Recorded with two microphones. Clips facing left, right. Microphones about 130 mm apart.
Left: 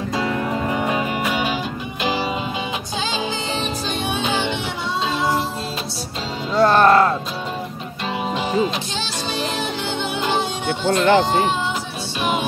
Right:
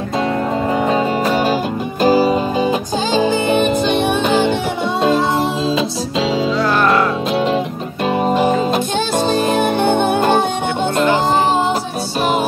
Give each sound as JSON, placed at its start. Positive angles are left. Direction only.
{"t": 0.2, "sound": "music", "side_deg": -25}
{"t": 3.2, "sound": "music", "side_deg": -55}
{"t": 6.6, "sound": "music", "side_deg": 30}
{"t": 8.2, "sound": "music", "side_deg": -50}